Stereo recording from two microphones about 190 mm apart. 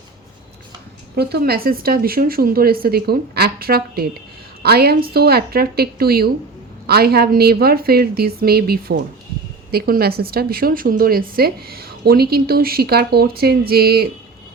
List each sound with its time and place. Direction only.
1.1 s a woman's voice: 60° right (ahead or behind)